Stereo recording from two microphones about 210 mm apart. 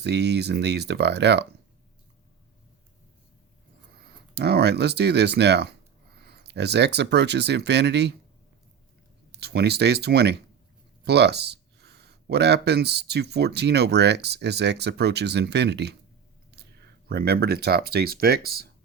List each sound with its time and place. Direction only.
0.0 s speech: 55° right (ahead or behind)
4.4 s speech: 50° right (ahead or behind)
9.3 s speech: 50° right (ahead or behind)
17.1 s speech: 50° right (ahead or behind)